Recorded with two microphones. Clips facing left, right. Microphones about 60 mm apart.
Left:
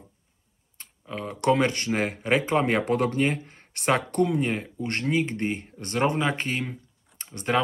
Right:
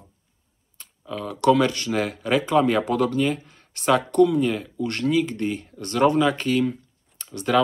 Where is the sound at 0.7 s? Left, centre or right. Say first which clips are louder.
Right 3 dB; left.